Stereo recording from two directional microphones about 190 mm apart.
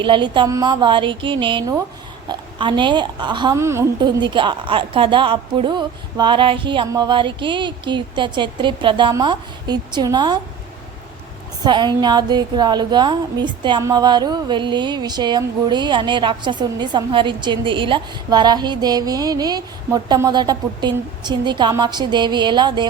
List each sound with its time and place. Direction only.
0.0 s a woman's voice: 25° right (ahead or behind)
11.6 s a woman's voice: 25° right (ahead or behind)